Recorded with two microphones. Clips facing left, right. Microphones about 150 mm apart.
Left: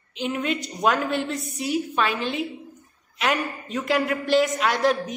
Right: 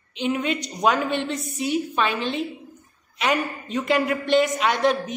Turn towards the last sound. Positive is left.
turn(degrees=0)  # may be behind; listen again after turning